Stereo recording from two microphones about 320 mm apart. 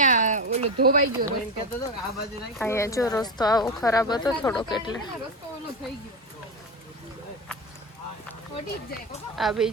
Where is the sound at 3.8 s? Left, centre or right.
Centre.